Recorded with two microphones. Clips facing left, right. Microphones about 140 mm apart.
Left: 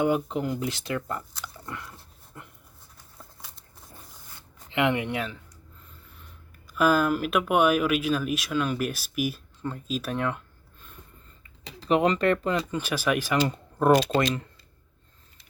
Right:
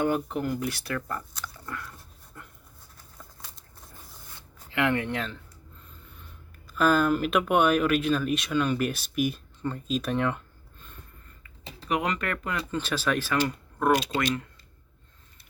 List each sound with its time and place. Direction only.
0.0 s speech: 15° left (ahead or behind)
1.6 s biting: 20° left (ahead or behind)
2.3 s dog: 15° left (ahead or behind)
4.7 s speech: 20° left (ahead or behind)
6.7 s speech: 5° left (ahead or behind)
11.4 s speech: 30° left (ahead or behind)
12.7 s speech: 10° left (ahead or behind)
13.5 s a sound: 30° left (ahead or behind)